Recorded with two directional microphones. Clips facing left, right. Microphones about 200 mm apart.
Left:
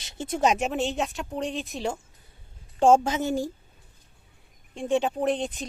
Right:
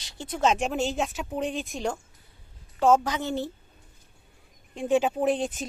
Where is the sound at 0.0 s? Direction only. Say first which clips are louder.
Left 1 dB; 20° left (ahead or behind).